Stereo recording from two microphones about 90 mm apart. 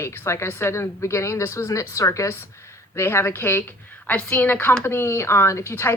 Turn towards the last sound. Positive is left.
turn(degrees=30)  # may be behind; listen again after turning